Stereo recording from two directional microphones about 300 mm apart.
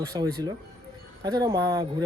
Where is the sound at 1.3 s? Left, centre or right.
Centre.